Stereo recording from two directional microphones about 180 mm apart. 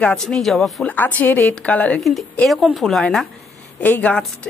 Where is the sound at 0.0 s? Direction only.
5° left (ahead or behind).